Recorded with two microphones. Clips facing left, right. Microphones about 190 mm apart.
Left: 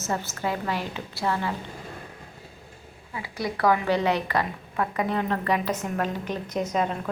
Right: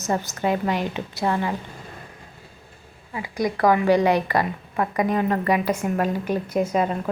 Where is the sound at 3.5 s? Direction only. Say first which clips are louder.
Right 3 dB; 45° right (ahead or behind).